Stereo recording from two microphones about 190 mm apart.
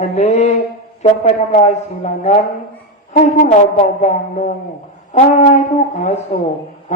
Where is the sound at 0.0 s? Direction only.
35° left (ahead or behind).